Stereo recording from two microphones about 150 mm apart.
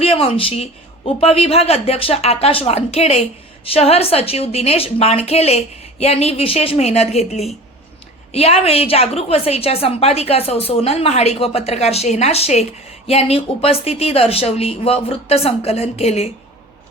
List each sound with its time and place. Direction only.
0.0 s a woman's voice: 40° left (ahead or behind)